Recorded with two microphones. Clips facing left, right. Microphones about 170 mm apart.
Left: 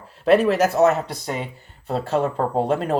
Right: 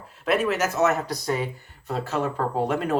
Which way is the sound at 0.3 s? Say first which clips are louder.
Left 7 dB; 35° left (ahead or behind).